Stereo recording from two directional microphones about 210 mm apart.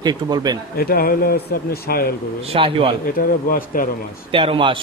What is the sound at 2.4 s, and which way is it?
Speech, 25° right (ahead or behind).